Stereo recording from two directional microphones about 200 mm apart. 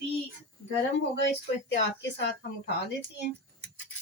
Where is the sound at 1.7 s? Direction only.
60° left (ahead or behind).